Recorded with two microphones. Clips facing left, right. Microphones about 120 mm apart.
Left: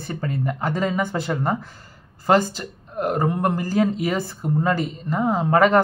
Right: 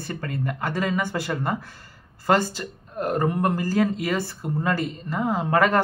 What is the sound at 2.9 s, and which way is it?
Speech, 15° left (ahead or behind).